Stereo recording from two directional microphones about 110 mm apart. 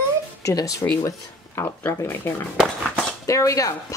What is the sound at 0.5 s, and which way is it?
Speech, 30° left (ahead or behind).